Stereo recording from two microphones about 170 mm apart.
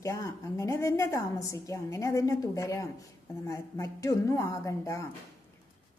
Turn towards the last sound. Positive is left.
turn(degrees=15)  # may be behind; listen again after turning